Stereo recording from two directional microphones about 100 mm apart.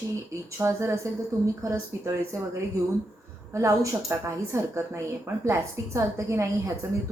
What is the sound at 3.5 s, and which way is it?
A woman's voice, 30° right (ahead or behind).